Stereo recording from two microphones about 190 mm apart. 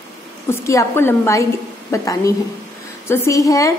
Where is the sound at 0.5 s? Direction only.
15° left (ahead or behind).